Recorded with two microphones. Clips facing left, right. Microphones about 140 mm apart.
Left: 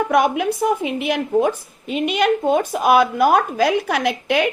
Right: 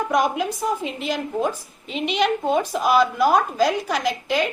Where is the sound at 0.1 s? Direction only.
60° left (ahead or behind).